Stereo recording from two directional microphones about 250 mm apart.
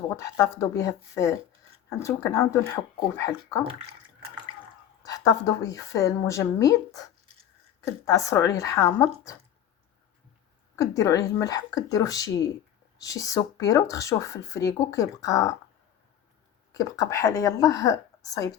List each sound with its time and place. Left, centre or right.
0.1 s speech: centre
3.6 s speech: right
5.0 s speech: centre
8.0 s speech: centre
10.8 s speech: centre
16.7 s speech: centre